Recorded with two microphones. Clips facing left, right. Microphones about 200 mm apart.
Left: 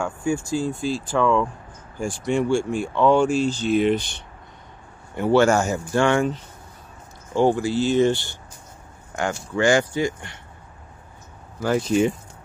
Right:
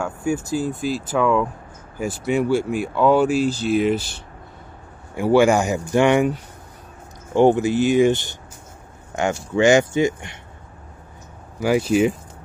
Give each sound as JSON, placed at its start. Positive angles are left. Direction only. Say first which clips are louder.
{"t": 0.0, "sound": "speech", "louder": "right 1 dB", "side_deg": -5}
{"t": 11.6, "sound": "speech", "louder": "right 2 dB", "side_deg": -10}